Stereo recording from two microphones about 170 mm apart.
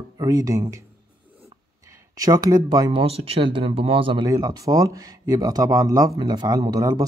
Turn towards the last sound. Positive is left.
turn(degrees=-20)  # may be behind; listen again after turning